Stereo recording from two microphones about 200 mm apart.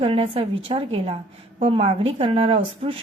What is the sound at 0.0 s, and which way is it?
A woman's voice, 30° right (ahead or behind).